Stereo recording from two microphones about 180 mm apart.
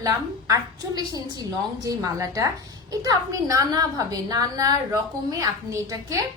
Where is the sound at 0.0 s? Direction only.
20° right (ahead or behind).